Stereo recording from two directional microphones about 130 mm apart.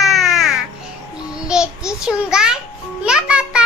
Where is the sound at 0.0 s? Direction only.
Centre (ahead or behind).